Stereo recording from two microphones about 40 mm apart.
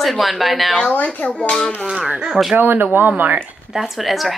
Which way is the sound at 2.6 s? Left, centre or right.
Right.